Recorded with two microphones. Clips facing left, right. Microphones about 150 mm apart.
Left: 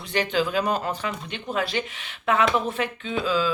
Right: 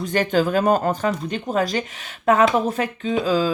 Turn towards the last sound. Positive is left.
turn(degrees=-40)  # may be behind; listen again after turning